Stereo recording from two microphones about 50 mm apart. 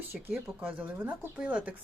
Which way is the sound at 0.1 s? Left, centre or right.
Right.